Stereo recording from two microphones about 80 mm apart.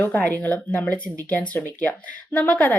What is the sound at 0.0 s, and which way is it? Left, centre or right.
Speech, centre.